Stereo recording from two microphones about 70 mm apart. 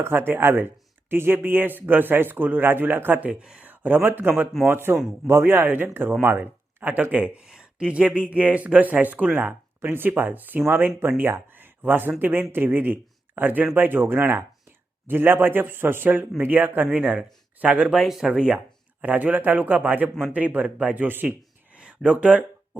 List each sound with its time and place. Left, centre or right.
0.0 s speech: right; by 17.9 s centre
17.9 s speech: centre; by 21.2 s right
21.2 s a sound: centre